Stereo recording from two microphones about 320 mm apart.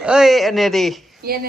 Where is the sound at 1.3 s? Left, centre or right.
Right.